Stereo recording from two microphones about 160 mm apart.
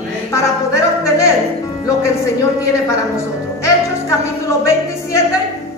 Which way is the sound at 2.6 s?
20° left (ahead or behind).